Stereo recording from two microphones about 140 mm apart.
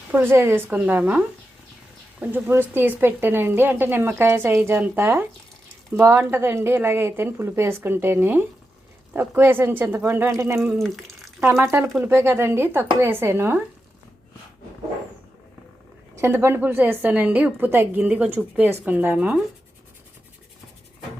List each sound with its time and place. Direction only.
0.1 s a woman's voice: 15° right (ahead or behind)
10.8 s water: centre (ahead or behind)
11.3 s a woman's voice: 20° right (ahead or behind)
16.1 s a woman's voice: 20° right (ahead or behind)